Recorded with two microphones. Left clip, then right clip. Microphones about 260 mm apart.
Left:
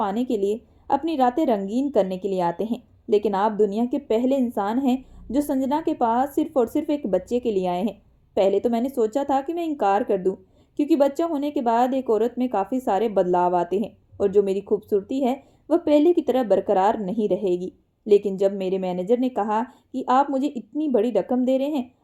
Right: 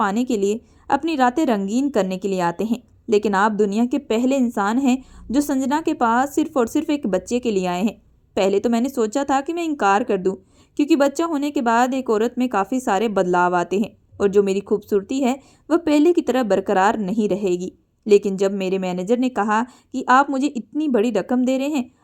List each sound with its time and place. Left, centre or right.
0.0 s speech: right